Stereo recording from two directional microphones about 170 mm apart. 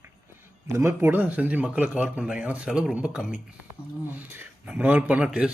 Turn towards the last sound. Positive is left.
turn(degrees=-5)  # may be behind; listen again after turning